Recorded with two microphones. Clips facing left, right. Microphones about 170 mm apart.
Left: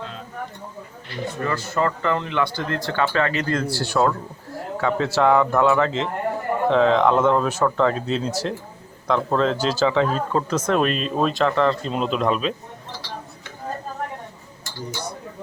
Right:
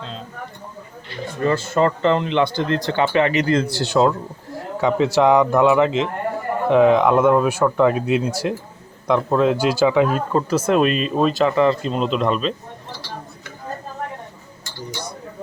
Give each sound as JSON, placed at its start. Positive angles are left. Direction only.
{"t": 1.5, "sound": "speech", "side_deg": -25}